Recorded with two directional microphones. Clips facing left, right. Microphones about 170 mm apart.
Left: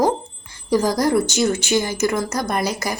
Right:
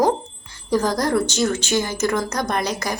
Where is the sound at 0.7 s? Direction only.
10° left (ahead or behind).